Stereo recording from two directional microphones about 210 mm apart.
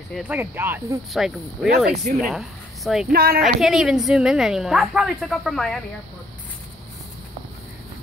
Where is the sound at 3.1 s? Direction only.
45° right (ahead or behind).